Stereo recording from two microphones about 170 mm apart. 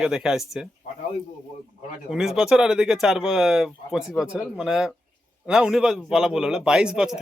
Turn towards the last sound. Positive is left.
turn(degrees=-5)  # may be behind; listen again after turning